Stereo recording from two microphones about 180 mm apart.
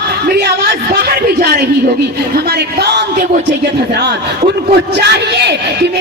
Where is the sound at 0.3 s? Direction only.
65° right (ahead or behind).